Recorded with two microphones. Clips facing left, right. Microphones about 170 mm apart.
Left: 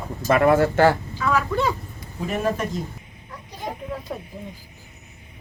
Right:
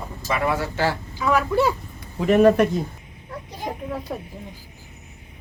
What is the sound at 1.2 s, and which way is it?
Speech, 10° right (ahead or behind).